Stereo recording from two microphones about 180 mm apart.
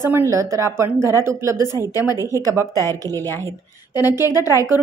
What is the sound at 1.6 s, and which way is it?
Speech, 20° left (ahead or behind).